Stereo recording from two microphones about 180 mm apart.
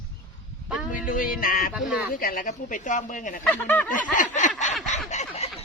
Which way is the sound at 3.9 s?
45° left (ahead or behind).